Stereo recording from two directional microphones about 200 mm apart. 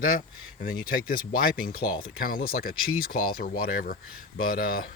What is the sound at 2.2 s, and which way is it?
Speech, 45° left (ahead or behind).